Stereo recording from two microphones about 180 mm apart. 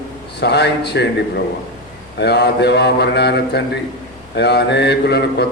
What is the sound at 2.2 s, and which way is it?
A man's voice, 65° left (ahead or behind).